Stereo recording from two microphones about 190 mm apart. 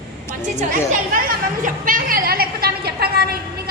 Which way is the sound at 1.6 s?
45° right (ahead or behind).